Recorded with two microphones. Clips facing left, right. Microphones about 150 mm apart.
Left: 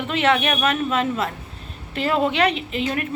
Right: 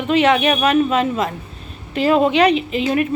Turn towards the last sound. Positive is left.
turn(degrees=-20)  # may be behind; listen again after turning